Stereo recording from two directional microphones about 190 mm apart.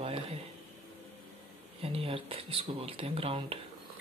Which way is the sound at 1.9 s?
30° right (ahead or behind).